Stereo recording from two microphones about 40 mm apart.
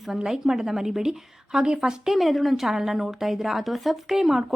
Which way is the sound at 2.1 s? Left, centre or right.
Centre.